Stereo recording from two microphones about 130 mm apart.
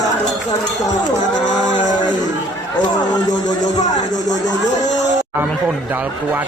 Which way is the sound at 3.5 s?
65° left (ahead or behind).